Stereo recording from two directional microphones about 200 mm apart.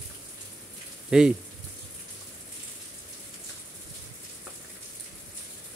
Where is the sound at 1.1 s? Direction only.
5° right (ahead or behind).